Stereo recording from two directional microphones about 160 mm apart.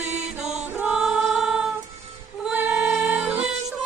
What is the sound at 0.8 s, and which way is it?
Music, 10° right (ahead or behind).